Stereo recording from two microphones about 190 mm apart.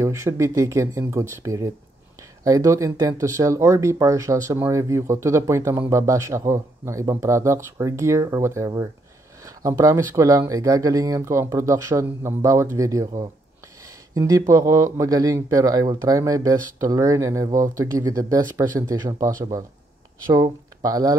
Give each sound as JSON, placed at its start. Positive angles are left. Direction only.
{"t": 0.0, "sound": "speech", "side_deg": -15}
{"t": 20.8, "sound": "speech", "side_deg": -20}